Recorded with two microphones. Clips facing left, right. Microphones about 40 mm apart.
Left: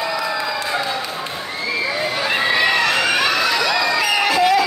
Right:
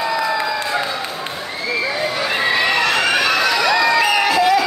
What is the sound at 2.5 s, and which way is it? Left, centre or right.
Crowd, centre.